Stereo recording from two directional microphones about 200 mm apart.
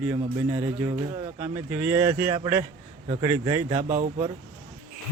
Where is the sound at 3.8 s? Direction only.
35° right (ahead or behind).